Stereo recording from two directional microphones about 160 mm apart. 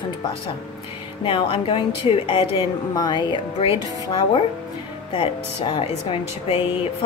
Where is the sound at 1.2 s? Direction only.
35° left (ahead or behind).